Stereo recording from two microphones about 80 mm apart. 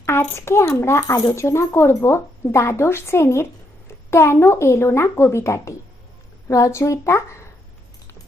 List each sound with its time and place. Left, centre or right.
0.0 s speech: left